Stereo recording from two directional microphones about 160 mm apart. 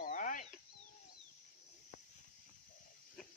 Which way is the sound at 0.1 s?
55° left (ahead or behind).